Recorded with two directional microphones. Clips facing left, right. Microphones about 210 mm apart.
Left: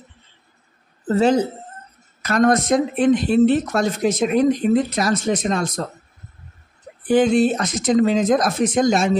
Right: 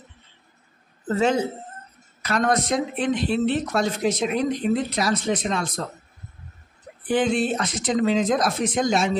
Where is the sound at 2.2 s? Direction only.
45° left (ahead or behind).